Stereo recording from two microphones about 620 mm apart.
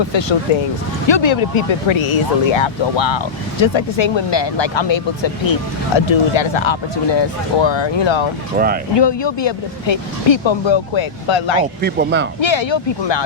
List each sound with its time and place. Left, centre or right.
0.1 s speech: left
8.5 s speech: centre
9.0 s speech: left
11.8 s speech: centre
12.4 s speech: left